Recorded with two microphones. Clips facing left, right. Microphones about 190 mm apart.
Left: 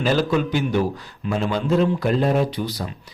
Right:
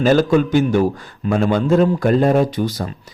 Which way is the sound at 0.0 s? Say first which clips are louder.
Right 6 dB; 45° right (ahead or behind).